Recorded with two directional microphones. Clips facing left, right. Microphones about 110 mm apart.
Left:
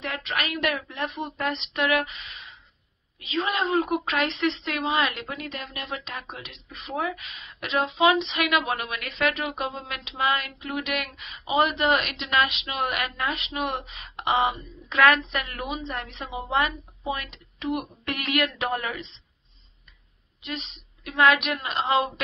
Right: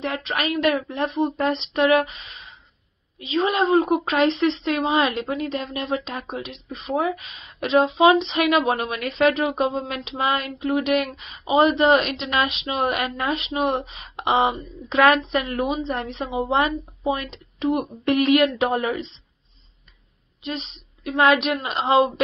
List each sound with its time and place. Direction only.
0.0 s a woman's voice: 30° right (ahead or behind)
20.4 s a woman's voice: 30° right (ahead or behind)